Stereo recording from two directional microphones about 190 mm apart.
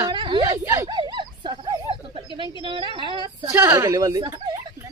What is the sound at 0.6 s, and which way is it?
Speech, 10° right (ahead or behind).